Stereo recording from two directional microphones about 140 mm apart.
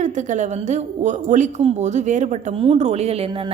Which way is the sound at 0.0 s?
60° right (ahead or behind).